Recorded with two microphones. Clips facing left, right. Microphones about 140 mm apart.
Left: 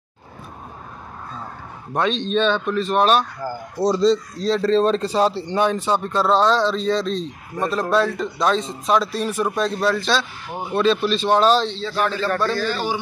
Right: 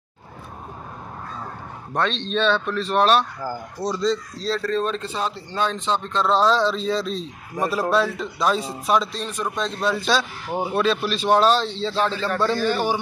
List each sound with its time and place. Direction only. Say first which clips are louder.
2.0 s speech: left 3 dB; 5° left (ahead or behind)
3.8 s speech: left 6 dB; 35° left (ahead or behind)
4.1 s speech: left 5 dB; 20° left (ahead or behind)
4.6 s speech: left 9 dB; 30° left (ahead or behind)
5.5 s a man's voice: left 4 dB; 15° left (ahead or behind); by 9.1 s 5° right (ahead or behind)
9.1 s a man's voice: left 5 dB; 10° left (ahead or behind)
9.9 s a man's voice: even; 10° right (ahead or behind)
11.8 s a man's voice: left 1 dB; 25° right (ahead or behind)